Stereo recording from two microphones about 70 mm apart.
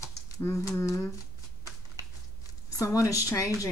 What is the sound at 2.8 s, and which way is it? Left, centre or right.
Speech, left.